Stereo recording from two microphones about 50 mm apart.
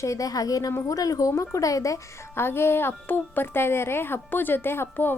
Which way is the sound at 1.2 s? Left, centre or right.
Left.